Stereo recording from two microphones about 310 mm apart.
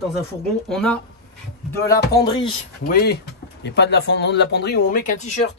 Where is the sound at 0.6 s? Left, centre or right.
Centre.